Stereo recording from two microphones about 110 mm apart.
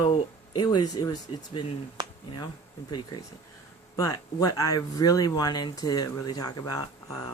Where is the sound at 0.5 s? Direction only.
40° left (ahead or behind).